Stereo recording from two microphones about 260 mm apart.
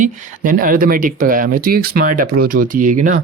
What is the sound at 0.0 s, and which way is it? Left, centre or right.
Speech, right.